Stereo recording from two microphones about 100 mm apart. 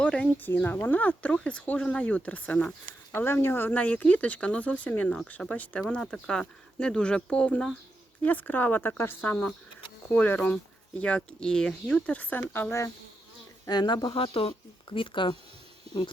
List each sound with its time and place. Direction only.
0.0 s speech: 10° left (ahead or behind)
13.7 s speech: 45° left (ahead or behind)